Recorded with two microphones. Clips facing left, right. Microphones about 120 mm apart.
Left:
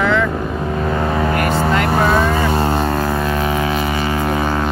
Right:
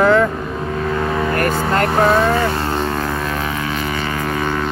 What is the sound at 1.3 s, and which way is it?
Vehicle, 40° right (ahead or behind).